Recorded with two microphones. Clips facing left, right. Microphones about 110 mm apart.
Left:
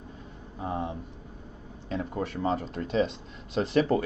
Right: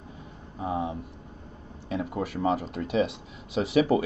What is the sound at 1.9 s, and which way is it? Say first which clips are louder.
Speech: right 1 dB; 10° right (ahead or behind).